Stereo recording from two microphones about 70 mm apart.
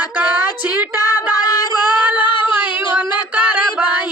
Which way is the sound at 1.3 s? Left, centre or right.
Left.